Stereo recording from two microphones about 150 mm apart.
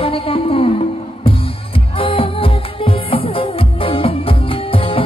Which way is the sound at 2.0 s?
35° left (ahead or behind).